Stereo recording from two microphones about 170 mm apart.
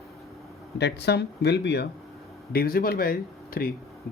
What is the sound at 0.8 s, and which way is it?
Speech, 85° left.